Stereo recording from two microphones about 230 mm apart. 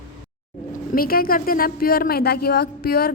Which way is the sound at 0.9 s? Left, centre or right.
Left.